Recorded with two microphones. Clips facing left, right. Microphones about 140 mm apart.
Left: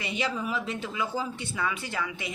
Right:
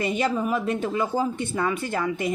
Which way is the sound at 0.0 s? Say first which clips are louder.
Right 7 dB; 45° right (ahead or behind).